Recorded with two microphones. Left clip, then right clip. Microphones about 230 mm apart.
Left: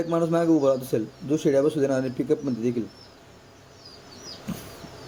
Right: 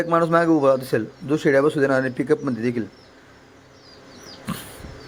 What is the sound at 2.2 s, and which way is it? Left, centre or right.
Speech, right.